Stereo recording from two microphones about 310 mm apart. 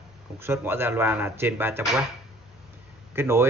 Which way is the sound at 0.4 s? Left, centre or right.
Centre.